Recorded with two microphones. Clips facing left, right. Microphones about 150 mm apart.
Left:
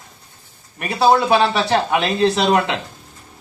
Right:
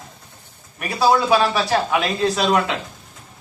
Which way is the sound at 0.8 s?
25° left (ahead or behind).